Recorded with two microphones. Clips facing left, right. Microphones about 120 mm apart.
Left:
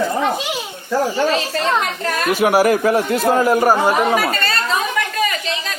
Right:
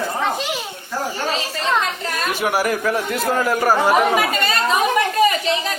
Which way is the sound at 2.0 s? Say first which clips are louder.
Left 4 dB; 65° left (ahead or behind).